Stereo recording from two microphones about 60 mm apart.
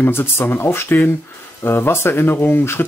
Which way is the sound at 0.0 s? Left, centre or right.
Left.